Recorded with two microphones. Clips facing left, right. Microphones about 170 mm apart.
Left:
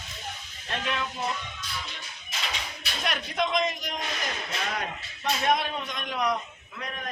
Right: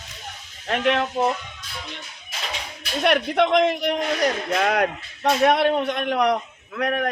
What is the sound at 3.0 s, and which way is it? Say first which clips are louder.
Speech: right 10 dB; 65° right (ahead or behind).